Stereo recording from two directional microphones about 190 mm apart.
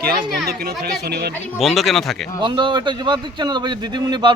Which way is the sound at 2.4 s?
25° right (ahead or behind).